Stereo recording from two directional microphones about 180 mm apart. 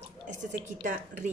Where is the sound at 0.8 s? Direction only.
45° right (ahead or behind).